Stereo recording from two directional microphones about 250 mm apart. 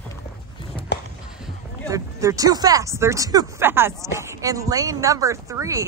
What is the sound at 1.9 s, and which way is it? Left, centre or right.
Speech, centre.